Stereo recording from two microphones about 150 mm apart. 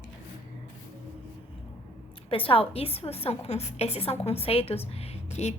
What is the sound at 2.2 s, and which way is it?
A woman's voice, 35° left (ahead or behind).